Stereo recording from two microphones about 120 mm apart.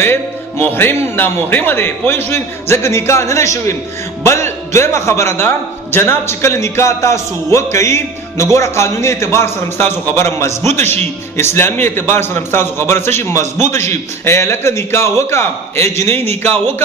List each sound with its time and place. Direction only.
0.0 s a man's voice: 20° left (ahead or behind)